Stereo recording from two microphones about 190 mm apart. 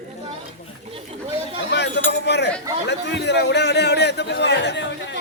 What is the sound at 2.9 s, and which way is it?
A man's voice, 65° left (ahead or behind).